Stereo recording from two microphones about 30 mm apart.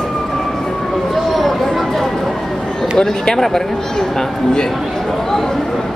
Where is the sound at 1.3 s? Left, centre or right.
Centre.